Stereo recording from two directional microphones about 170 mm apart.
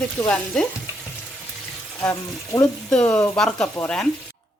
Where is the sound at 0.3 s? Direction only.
5° left (ahead or behind).